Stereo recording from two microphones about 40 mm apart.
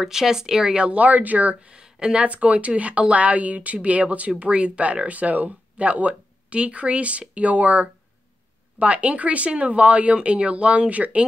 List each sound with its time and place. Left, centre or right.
0.0 s speech: centre
0.9 s speech: right